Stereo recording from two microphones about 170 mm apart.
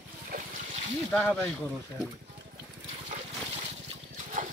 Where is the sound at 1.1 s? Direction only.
5° left (ahead or behind).